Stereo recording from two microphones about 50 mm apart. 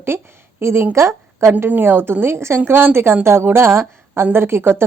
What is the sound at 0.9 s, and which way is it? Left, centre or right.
Speech, right.